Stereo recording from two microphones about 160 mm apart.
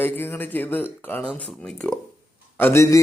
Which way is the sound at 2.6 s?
15° left (ahead or behind).